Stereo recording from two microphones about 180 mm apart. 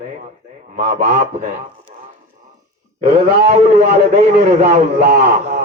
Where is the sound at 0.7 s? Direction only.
40° right (ahead or behind).